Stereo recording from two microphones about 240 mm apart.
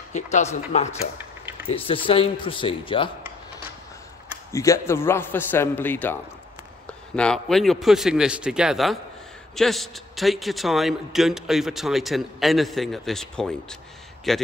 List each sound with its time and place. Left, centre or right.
0.1 s a man's voice: left
4.5 s a man's voice: centre